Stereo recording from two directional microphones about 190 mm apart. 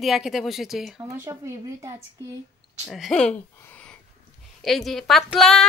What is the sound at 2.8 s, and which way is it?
A woman's voice, centre (ahead or behind).